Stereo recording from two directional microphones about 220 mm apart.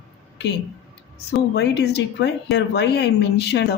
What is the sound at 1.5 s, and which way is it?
Speech, 50° left (ahead or behind).